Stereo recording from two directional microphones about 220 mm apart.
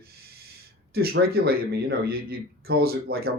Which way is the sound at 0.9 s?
45° right (ahead or behind).